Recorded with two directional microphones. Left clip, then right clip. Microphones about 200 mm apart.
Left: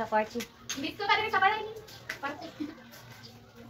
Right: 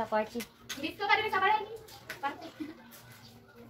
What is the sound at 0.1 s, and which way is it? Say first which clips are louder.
Speech: left 3 dB; 30° right (ahead or behind).